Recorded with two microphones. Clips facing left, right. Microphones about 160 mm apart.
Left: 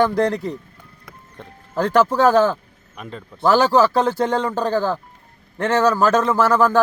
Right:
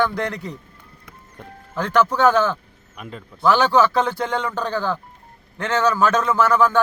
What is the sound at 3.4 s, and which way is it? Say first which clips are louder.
A man's voice: left 2 dB; 40° left (ahead or behind).